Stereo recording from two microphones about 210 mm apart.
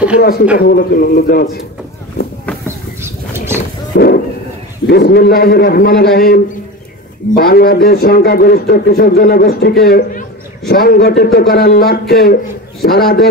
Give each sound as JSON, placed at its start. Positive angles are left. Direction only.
{"t": 0.2, "sound": "speech", "side_deg": 45}
{"t": 3.0, "sound": "pigeon", "side_deg": -10}
{"t": 3.9, "sound": "a sound", "side_deg": 45}
{"t": 4.8, "sound": "speech", "side_deg": 50}